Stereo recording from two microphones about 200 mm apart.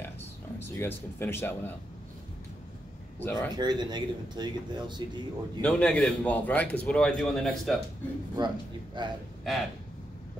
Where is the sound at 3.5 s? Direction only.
20° right (ahead or behind).